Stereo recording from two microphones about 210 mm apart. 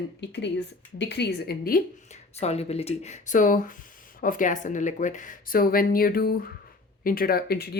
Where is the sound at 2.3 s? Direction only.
30° left (ahead or behind).